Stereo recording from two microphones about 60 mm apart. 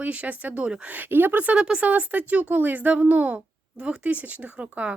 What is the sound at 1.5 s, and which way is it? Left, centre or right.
Speech, centre.